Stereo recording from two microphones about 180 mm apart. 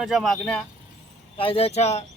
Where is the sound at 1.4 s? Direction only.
30° left (ahead or behind).